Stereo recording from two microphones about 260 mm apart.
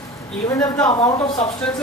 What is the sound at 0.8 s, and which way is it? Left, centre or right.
Speech, centre.